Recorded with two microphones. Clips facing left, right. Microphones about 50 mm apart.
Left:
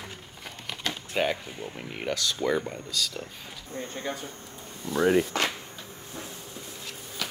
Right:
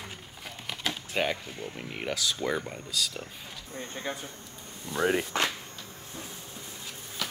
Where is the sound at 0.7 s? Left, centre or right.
Centre.